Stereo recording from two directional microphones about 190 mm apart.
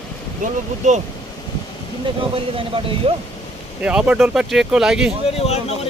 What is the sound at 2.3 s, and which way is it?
Speech, 30° right (ahead or behind).